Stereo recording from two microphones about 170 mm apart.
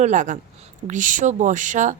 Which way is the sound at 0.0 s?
45° right (ahead or behind).